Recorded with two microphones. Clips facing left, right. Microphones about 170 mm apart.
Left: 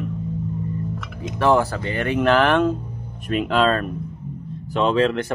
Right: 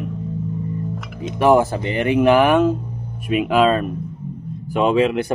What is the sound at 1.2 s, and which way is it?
Speech, 15° right (ahead or behind).